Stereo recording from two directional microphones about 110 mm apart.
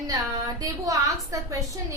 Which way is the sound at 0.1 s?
35° right (ahead or behind).